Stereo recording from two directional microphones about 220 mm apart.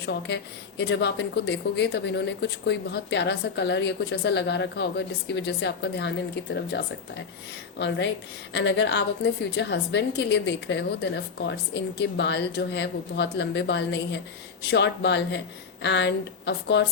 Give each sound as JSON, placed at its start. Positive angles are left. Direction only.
{"t": 0.0, "sound": "speech", "side_deg": 50}